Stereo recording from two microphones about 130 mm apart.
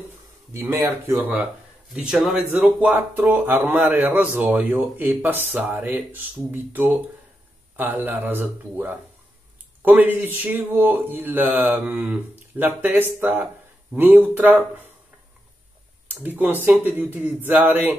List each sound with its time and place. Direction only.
0.5 s speech: 20° right (ahead or behind)
16.2 s speech: 15° right (ahead or behind)